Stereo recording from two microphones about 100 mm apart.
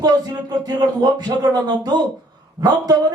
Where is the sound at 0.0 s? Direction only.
40° right (ahead or behind).